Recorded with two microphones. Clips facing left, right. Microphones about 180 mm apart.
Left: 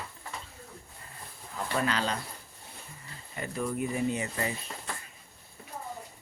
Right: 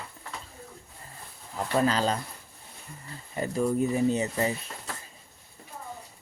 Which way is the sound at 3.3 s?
30° right (ahead or behind).